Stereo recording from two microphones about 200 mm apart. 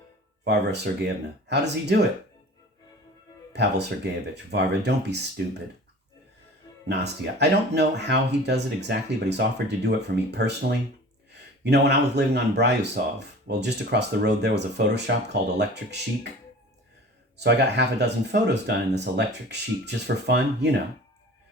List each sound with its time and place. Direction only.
0.4 s speech: 55° right (ahead or behind)
3.5 s speech: 55° right (ahead or behind)
6.8 s speech: 60° right (ahead or behind)
17.3 s speech: 55° right (ahead or behind)